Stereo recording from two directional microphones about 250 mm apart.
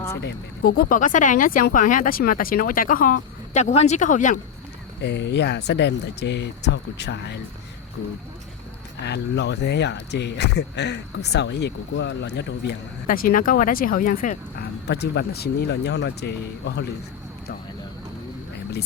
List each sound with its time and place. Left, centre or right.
0.2 s speech: left
5.0 s speech: left
9.0 s speech: left